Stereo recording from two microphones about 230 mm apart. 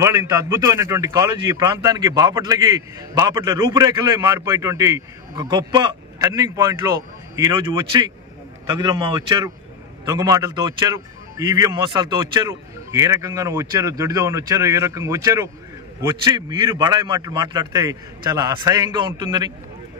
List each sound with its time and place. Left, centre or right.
0.0 s a man's voice: centre